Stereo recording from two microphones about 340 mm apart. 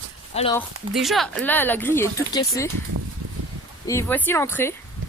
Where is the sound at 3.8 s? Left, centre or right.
Centre.